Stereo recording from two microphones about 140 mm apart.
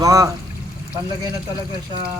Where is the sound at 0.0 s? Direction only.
25° right (ahead or behind).